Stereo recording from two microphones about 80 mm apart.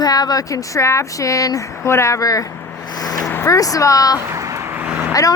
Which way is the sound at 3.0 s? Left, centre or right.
Left.